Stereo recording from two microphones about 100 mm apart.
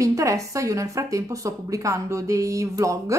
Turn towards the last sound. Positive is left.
turn(degrees=-35)  # may be behind; listen again after turning